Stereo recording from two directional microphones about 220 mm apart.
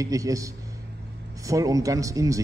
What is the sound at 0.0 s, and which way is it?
A man's voice, 15° right (ahead or behind).